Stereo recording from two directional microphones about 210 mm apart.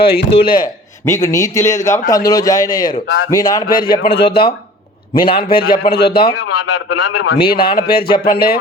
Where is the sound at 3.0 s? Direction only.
70° left (ahead or behind).